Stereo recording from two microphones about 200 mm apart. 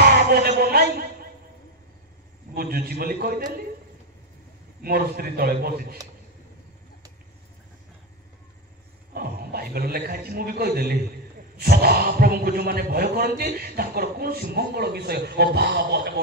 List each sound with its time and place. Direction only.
0.0 s a sound: 50° right (ahead or behind)
2.5 s speech: 50° right (ahead or behind)
4.8 s speech: 50° right (ahead or behind)
9.1 s speech: 50° right (ahead or behind)